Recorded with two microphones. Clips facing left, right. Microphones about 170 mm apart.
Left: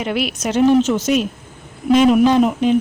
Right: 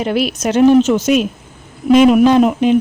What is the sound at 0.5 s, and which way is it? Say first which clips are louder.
Speech: right 4 dB; 60° right (ahead or behind).